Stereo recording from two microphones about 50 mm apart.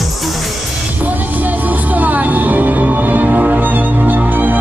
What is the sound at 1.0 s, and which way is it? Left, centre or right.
Music, right.